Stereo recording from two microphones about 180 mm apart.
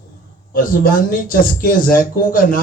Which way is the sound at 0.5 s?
50° left (ahead or behind).